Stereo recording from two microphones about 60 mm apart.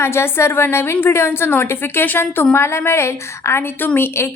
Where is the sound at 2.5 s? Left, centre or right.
Left.